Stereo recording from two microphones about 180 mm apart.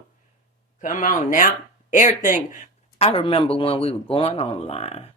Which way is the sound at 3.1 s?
30° left (ahead or behind).